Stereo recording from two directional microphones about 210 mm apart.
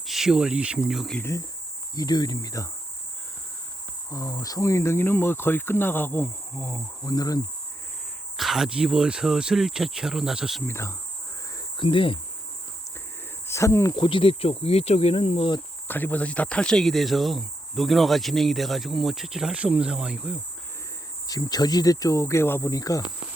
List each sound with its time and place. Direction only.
0.0 s speech: centre (ahead or behind); by 2.6 s 15° left (ahead or behind)
4.1 s speech: 15° left (ahead or behind)
8.4 s speech: centre (ahead or behind)
10.7 s speech: 15° left (ahead or behind)
11.8 s speech: 25° left (ahead or behind)
13.5 s speech: 15° left (ahead or behind)
15.9 s speech: 10° left (ahead or behind)
21.2 s speech: 15° left (ahead or behind)